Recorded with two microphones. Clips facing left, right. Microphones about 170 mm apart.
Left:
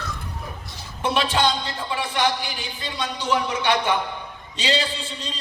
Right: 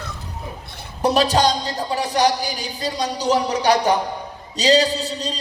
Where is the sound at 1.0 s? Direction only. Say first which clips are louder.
Right 5 dB; 40° right (ahead or behind).